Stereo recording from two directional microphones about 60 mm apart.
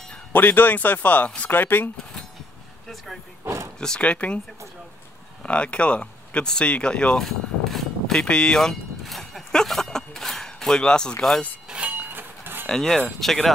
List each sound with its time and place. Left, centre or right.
0.3 s speech: left
1.5 s speech: left
3.4 s a sound: right
3.8 s speech: centre
5.4 s speech: centre
7.2 s a sound: centre
11.7 s train: centre
12.1 s a sound: right
12.6 s speech: centre